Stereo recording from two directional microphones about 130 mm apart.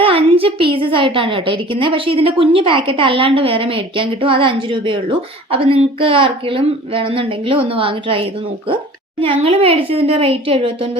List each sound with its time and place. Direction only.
0.0 s a child's voice: 45° right (ahead or behind)